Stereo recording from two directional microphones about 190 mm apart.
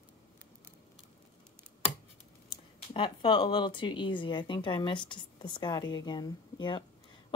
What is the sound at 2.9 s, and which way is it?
Speech, 25° left (ahead or behind).